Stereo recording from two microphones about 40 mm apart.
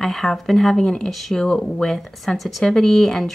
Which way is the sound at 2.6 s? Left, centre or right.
Centre.